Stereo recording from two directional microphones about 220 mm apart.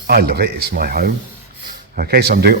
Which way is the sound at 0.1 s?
45° right (ahead or behind).